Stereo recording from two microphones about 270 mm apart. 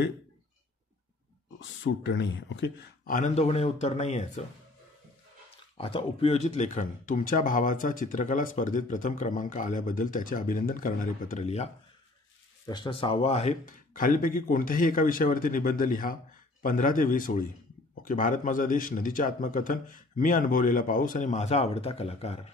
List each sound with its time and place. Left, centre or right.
1.6 s a man's voice: left
3.2 s speech: left
5.8 s a man's voice: centre